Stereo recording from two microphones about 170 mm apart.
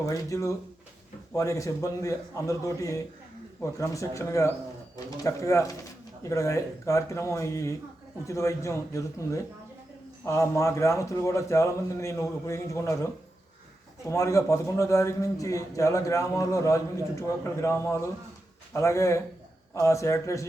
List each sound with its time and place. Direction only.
0.0 s a man's voice: 20° left (ahead or behind)
14.1 s a man's voice: 20° left (ahead or behind)